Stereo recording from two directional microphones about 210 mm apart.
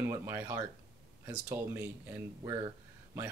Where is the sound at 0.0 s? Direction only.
15° right (ahead or behind).